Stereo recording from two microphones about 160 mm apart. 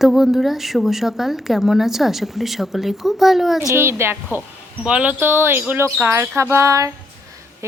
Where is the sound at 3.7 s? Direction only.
15° right (ahead or behind).